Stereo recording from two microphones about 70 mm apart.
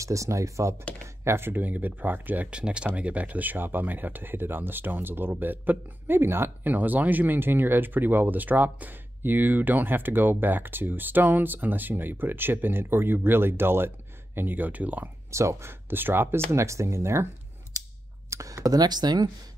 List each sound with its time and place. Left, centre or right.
0.0 s speech: right
15.3 s speech: right
15.9 s speech: right
16.4 s speech: right
18.3 s speech: right